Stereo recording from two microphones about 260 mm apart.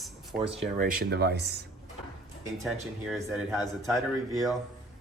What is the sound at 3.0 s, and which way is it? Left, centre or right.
Speech, centre.